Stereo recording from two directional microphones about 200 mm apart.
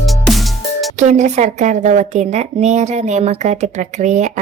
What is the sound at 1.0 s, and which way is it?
A woman's voice, 35° right (ahead or behind).